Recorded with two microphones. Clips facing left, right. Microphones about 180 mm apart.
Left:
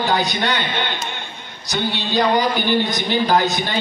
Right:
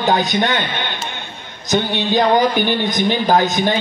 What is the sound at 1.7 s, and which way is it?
A man's voice, 20° right (ahead or behind).